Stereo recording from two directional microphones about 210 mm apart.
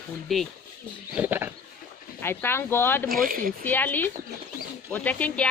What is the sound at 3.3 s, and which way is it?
Speech, 40° right (ahead or behind).